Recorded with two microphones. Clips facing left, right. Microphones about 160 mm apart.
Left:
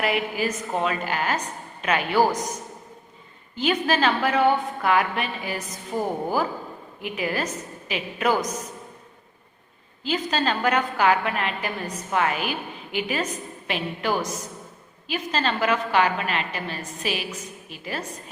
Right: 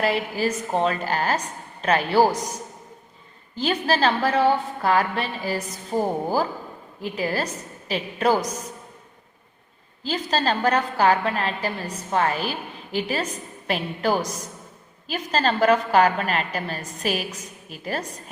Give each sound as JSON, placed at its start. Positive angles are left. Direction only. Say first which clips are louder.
{"t": 0.0, "sound": "a woman's voice", "louder": "right 2 dB", "side_deg": -35}
{"t": 3.5, "sound": "a woman's voice", "louder": "even", "side_deg": -35}
{"t": 10.0, "sound": "a woman's voice", "louder": "even", "side_deg": -35}